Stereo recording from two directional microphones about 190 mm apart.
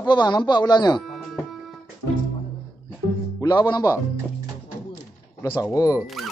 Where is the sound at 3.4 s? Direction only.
20° left (ahead or behind).